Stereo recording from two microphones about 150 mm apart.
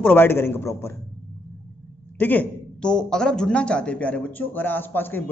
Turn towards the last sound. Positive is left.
turn(degrees=15)  # may be behind; listen again after turning